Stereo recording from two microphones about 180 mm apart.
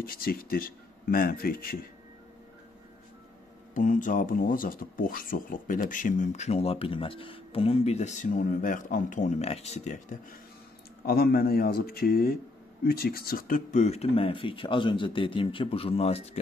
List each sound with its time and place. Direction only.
0.0 s speech: 55° left (ahead or behind)
3.7 s speech: 45° left (ahead or behind)
11.1 s a man's voice: 60° left (ahead or behind); by 16.3 s 35° left (ahead or behind)